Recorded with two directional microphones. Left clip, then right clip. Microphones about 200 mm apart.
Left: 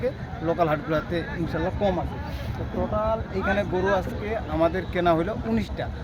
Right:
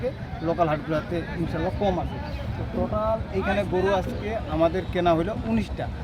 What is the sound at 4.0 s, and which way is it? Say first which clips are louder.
Speech: even; 10° left (ahead or behind).